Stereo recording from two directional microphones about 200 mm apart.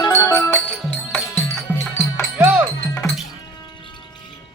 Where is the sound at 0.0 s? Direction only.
10° left (ahead or behind).